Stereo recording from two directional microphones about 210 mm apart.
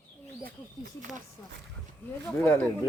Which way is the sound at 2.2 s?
10° left (ahead or behind).